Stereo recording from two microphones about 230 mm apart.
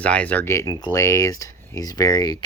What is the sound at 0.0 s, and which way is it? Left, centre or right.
Speech, centre.